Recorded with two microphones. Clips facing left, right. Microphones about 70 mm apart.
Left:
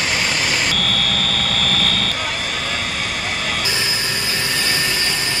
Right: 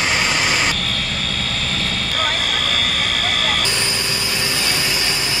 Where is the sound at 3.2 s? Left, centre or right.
Right.